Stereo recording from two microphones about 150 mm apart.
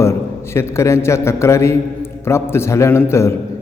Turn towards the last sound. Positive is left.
turn(degrees=20)  # may be behind; listen again after turning